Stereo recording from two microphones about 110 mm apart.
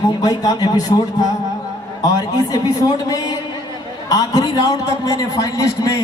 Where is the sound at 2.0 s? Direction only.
35° left (ahead or behind).